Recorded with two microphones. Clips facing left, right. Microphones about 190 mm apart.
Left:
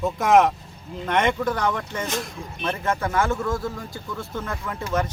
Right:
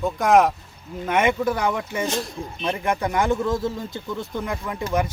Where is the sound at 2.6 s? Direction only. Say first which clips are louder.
Right 1 dB; 15° right (ahead or behind).